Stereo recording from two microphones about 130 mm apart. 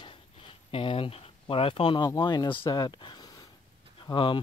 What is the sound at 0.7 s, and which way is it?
Speech, 45° left (ahead or behind).